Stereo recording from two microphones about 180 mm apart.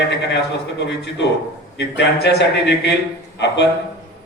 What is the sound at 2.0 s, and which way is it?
Speech, 70° left (ahead or behind).